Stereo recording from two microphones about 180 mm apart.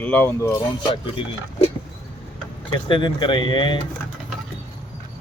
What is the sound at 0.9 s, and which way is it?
Speech, 30° left (ahead or behind).